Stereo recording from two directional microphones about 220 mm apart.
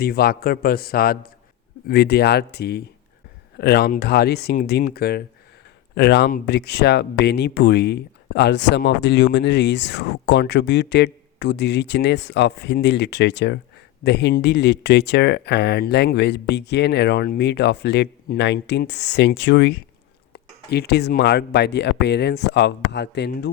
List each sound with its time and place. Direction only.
0.0 s speech: 45° left (ahead or behind)